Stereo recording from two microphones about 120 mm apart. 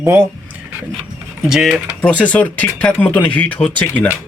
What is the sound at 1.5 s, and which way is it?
Mechanisms, 5° right (ahead or behind).